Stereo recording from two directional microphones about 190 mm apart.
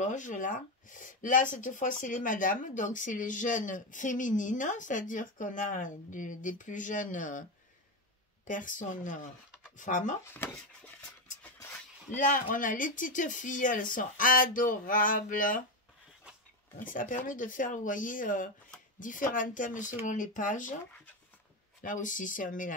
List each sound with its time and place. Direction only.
0.0 s speech: 40° left (ahead or behind)
8.5 s speech: 45° left (ahead or behind)
10.2 s speech: 10° left (ahead or behind)
12.2 s speech: 45° left (ahead or behind)
16.7 s speech: 45° left (ahead or behind)
21.8 s speech: 45° left (ahead or behind)